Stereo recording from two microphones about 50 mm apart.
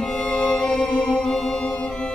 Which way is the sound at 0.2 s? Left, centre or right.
Centre.